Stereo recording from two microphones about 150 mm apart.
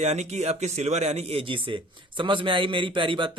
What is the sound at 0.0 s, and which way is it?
Speech, 50° right (ahead or behind).